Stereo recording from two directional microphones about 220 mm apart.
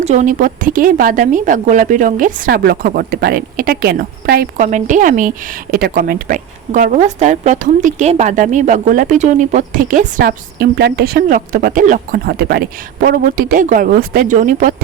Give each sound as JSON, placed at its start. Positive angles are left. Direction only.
{"t": 0.0, "sound": "a woman's voice", "side_deg": -30}